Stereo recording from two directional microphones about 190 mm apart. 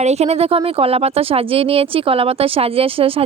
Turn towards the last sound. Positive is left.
turn(degrees=-30)  # may be behind; listen again after turning